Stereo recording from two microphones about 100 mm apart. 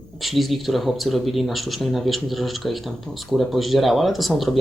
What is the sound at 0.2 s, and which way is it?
Speech, centre (ahead or behind).